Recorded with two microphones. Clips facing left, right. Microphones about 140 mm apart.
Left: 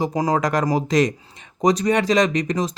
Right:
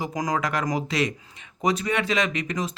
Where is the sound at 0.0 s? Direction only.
30° left (ahead or behind).